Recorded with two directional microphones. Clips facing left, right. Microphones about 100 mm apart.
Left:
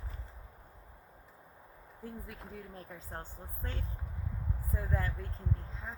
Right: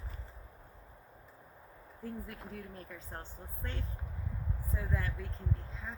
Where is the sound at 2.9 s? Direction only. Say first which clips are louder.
Left 1 dB; 40° left (ahead or behind).